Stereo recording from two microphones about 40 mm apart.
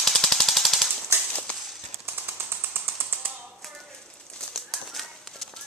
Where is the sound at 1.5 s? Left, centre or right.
Left.